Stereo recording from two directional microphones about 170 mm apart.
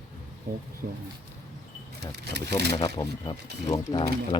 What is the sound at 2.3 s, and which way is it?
Speech, 80° right.